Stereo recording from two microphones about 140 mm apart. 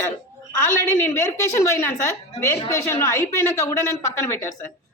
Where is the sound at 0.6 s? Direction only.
20° left (ahead or behind).